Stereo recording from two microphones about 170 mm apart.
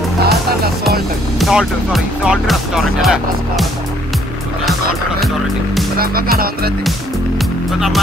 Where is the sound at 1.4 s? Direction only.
5° right (ahead or behind).